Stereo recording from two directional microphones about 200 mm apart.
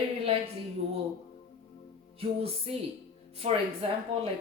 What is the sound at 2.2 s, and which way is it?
Speech, 30° right (ahead or behind).